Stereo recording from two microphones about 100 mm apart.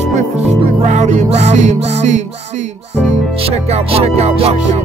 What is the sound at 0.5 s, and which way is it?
Music, 90° right.